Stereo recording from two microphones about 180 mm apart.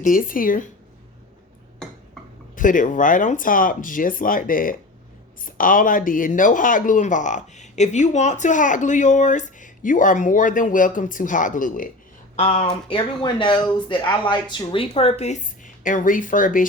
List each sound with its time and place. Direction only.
0.0 s speech: 50° left (ahead or behind)
2.6 s speech: 45° left (ahead or behind)
12.4 s speech: 35° left (ahead or behind)